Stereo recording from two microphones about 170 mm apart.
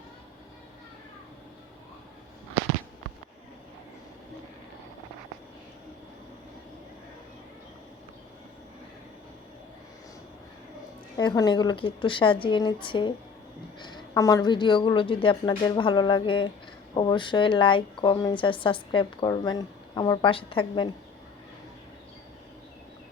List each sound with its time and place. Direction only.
11.2 s speech: 25° left (ahead or behind)